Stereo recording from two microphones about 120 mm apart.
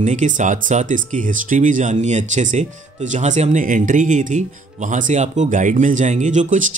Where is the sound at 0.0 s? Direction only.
90° right.